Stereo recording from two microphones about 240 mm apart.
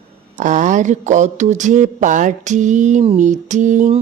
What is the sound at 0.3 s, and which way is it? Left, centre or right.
Speech, right.